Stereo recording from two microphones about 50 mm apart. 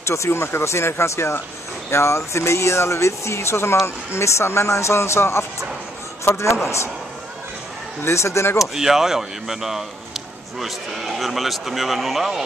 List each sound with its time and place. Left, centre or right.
0.0 s speech: left
8.0 s speech: left
8.5 s a man's voice: centre